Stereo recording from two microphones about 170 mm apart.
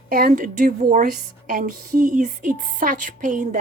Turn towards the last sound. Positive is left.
turn(degrees=-50)  # may be behind; listen again after turning